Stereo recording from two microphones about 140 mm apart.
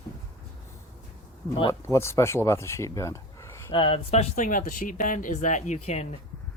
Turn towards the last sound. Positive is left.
turn(degrees=55)  # may be behind; listen again after turning